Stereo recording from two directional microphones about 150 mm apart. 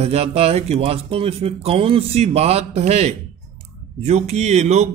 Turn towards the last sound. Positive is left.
turn(degrees=-50)  # may be behind; listen again after turning